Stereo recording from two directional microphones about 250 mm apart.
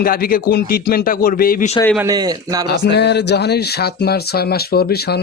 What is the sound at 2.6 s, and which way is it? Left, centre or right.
Speech, left.